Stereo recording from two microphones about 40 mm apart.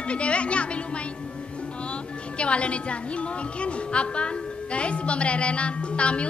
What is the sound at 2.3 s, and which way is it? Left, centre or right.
Speech, left.